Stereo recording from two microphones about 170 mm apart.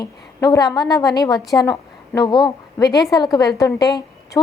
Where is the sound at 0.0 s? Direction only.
20° left (ahead or behind).